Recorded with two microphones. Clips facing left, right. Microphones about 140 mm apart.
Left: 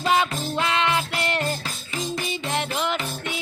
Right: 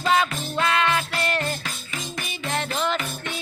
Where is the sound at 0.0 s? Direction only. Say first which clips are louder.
Even; 20° left (ahead or behind).